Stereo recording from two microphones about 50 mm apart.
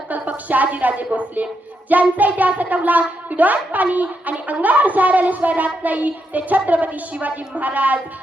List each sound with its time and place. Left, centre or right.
0.1 s a woman's voice: right
1.9 s child singing: right